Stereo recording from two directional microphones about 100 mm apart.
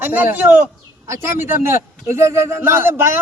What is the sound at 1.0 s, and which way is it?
A man's voice, 30° right (ahead or behind).